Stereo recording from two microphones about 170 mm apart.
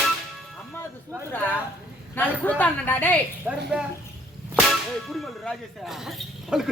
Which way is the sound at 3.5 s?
10° right (ahead or behind).